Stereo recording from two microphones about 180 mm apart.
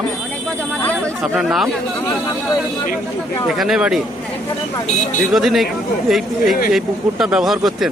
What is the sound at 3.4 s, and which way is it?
Speech, centre (ahead or behind).